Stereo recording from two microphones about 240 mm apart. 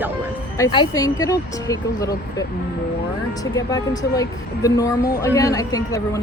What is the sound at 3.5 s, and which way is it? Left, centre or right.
Speech, centre.